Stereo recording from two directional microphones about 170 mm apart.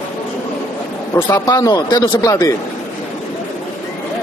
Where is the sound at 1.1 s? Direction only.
20° left (ahead or behind).